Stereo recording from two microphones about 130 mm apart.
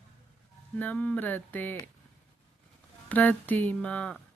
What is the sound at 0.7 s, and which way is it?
Speech, 10° left (ahead or behind).